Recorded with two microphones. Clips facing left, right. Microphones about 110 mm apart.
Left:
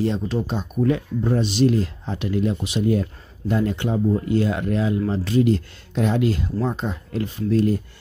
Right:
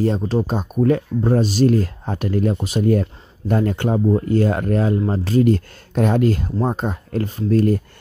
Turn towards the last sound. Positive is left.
turn(degrees=-50)  # may be behind; listen again after turning